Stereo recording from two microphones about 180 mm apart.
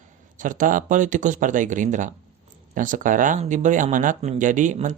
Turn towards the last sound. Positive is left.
turn(degrees=-45)  # may be behind; listen again after turning